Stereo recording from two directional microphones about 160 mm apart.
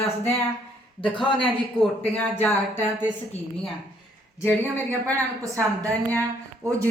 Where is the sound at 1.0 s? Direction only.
30° left (ahead or behind).